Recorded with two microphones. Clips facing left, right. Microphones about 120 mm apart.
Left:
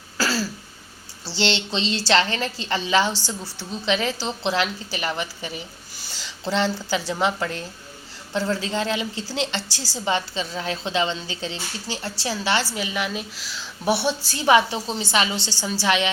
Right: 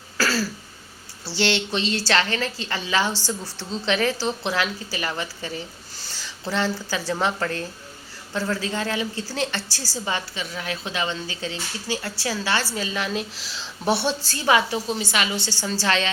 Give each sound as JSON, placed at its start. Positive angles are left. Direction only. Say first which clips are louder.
{"t": 0.2, "sound": "throat clearing", "louder": "right 1 dB", "side_deg": 20}
{"t": 1.4, "sound": "speech", "louder": "right 1 dB", "side_deg": 25}
{"t": 3.1, "sound": "a woman's voice", "louder": "right 1 dB", "side_deg": -15}
{"t": 3.8, "sound": "a woman's voice", "louder": "right 1 dB", "side_deg": 15}
{"t": 14.3, "sound": "speech", "louder": "left 4 dB", "side_deg": 20}
{"t": 15.6, "sound": "speech", "louder": "left 2 dB", "side_deg": 15}